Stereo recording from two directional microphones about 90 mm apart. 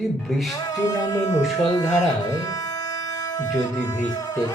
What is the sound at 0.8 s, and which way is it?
Speech, 45° left (ahead or behind).